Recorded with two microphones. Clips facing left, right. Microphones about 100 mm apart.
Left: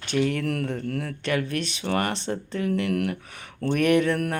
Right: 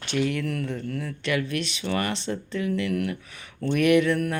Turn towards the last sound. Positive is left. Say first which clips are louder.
# right 1 dB
turn(degrees=45)  # may be behind; listen again after turning